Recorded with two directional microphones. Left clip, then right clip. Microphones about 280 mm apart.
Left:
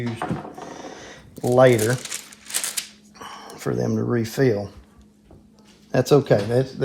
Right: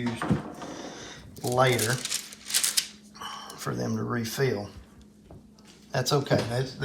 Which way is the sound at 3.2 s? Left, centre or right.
Left.